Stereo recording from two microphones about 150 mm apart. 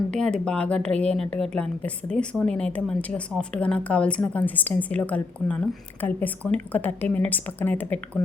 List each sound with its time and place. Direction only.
0.1 s speech: 5° left (ahead or behind)